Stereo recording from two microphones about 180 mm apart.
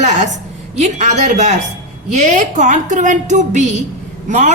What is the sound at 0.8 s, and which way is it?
A woman's voice, 40° right (ahead or behind).